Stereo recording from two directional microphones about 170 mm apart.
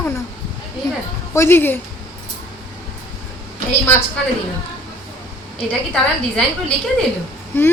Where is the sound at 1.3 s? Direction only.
15° left (ahead or behind).